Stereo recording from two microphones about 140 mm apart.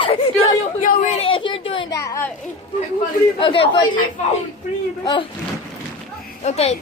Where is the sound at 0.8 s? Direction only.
80° left.